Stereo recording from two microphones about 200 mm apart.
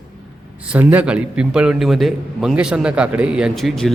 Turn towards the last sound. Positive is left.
turn(degrees=0)  # may be behind; listen again after turning